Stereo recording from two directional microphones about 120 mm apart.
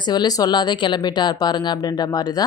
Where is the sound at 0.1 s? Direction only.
35° left (ahead or behind).